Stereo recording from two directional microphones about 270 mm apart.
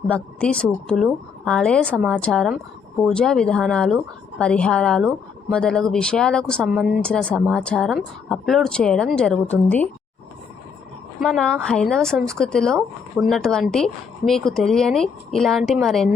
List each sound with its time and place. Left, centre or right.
0.1 s a woman's voice: centre
11.2 s a woman's voice: centre